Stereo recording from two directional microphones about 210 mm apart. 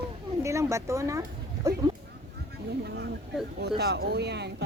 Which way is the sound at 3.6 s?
50° right (ahead or behind).